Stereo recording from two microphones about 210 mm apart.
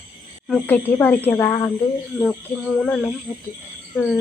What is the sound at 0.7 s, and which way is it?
Speech, 10° left (ahead or behind).